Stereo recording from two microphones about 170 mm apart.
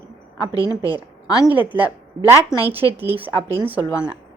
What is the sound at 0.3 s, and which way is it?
A woman's voice, 20° left (ahead or behind).